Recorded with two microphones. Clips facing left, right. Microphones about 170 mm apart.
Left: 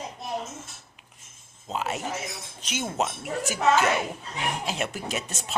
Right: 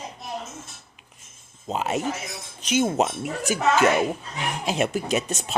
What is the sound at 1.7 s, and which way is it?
A woman's voice, 20° right (ahead or behind).